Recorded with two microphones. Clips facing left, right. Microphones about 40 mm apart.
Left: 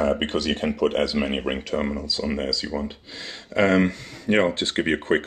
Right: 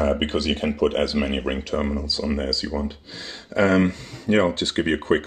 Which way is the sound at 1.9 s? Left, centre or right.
Left.